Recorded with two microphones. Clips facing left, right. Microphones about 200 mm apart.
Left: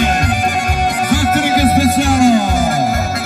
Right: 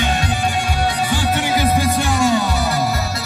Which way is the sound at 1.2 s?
90° left.